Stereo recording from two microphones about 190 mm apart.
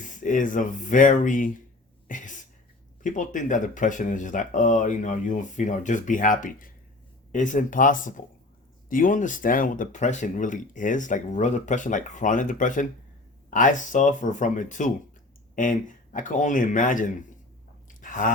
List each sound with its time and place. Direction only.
0.0 s speech: 40° left (ahead or behind)
2.0 s a sound: 45° left (ahead or behind)
3.0 s speech: 40° left (ahead or behind)
17.8 s sigh: 45° left (ahead or behind)